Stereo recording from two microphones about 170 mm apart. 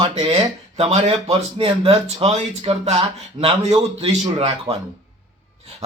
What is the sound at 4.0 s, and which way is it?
Speech, 35° right (ahead or behind).